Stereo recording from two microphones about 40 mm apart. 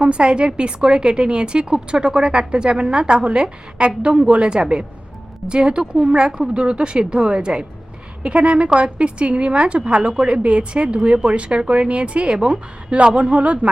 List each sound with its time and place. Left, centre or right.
0.0 s a woman's voice: right